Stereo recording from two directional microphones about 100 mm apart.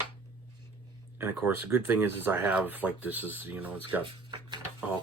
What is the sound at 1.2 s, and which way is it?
Speech, 20° right (ahead or behind).